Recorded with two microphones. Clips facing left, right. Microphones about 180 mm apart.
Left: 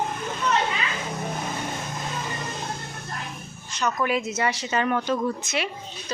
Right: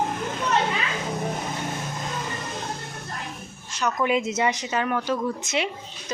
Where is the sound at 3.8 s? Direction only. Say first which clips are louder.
Right 1 dB; 15° right (ahead or behind).